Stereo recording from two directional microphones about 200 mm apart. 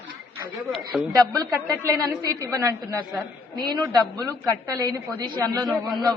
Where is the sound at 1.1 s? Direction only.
15° right (ahead or behind).